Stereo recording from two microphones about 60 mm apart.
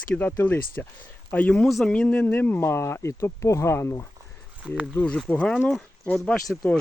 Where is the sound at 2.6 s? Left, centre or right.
Left.